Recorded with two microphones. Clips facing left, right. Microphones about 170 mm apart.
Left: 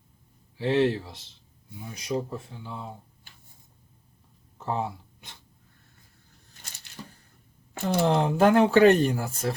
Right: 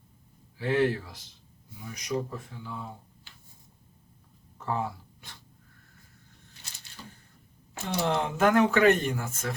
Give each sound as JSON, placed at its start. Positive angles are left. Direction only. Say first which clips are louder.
{"t": 0.5, "sound": "speech", "louder": "left 2 dB", "side_deg": 25}
{"t": 4.5, "sound": "a sound", "louder": "left 1 dB", "side_deg": 25}
{"t": 7.9, "sound": "speech", "louder": "left 5 dB", "side_deg": 30}